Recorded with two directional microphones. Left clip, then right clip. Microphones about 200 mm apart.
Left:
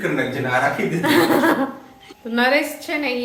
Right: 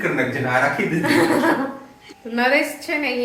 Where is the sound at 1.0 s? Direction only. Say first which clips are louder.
Left 2 dB; 15° left (ahead or behind).